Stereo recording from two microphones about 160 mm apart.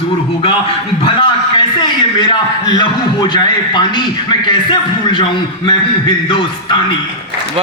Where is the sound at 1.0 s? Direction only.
35° left (ahead or behind).